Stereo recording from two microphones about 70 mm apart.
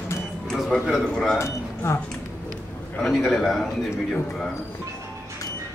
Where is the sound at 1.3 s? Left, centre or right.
Left.